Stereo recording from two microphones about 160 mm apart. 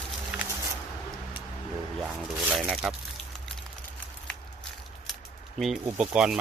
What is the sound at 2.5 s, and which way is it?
Speech, 5° right (ahead or behind).